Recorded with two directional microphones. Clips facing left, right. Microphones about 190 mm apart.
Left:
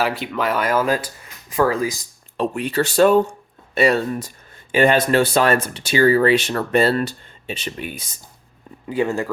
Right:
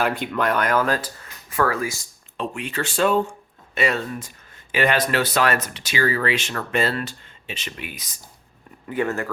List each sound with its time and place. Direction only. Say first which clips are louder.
0.0 s speech: left 1 dB; 5° left (ahead or behind)
2.4 s speech: left 7 dB; 40° left (ahead or behind)
9.0 s speech: left 3 dB; 15° left (ahead or behind)